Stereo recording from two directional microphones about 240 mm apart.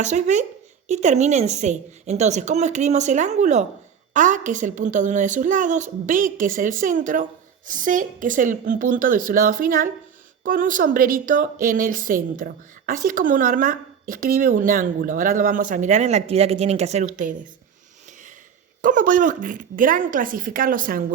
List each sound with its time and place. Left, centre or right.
0.0 s a woman's voice: right
18.8 s a woman's voice: right